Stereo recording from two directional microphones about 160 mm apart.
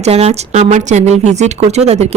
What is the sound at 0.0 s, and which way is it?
Speech, 40° right (ahead or behind).